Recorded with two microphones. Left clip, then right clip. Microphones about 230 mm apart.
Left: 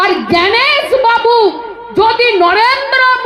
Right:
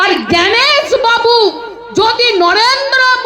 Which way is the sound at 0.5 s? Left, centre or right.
Right.